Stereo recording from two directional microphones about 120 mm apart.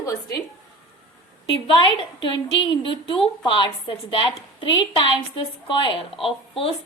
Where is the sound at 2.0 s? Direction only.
45° left (ahead or behind).